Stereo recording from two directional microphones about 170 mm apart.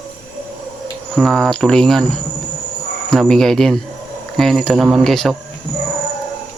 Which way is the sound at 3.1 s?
Centre (ahead or behind).